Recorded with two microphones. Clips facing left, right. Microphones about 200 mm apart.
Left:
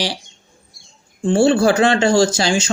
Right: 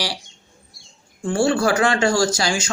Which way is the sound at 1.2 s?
25° left (ahead or behind).